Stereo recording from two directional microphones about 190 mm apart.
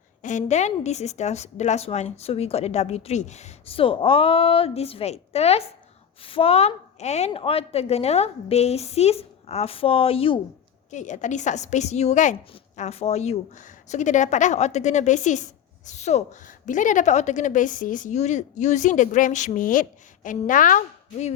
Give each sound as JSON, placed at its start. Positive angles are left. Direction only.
{"t": 0.2, "sound": "a woman's voice", "side_deg": 40}
{"t": 10.9, "sound": "a woman's voice", "side_deg": 40}